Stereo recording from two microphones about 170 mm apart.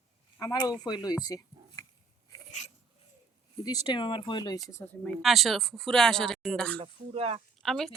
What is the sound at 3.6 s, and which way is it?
Speech, 25° left (ahead or behind).